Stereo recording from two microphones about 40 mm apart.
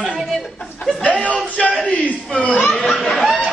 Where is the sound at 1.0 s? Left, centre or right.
Left.